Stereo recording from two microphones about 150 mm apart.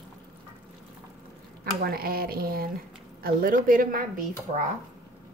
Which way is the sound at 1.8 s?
85° right.